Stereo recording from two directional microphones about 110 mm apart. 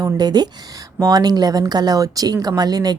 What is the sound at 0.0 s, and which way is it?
Speech, 40° right (ahead or behind).